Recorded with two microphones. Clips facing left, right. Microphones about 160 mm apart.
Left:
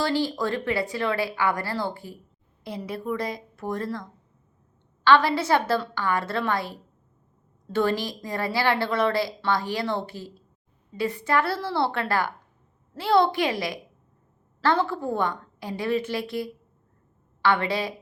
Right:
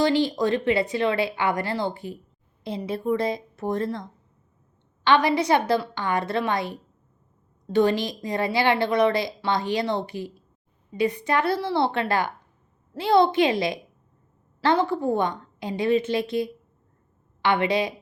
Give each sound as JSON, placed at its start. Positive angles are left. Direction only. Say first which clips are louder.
{"t": 0.0, "sound": "a woman's voice", "louder": "right 4 dB", "side_deg": -20}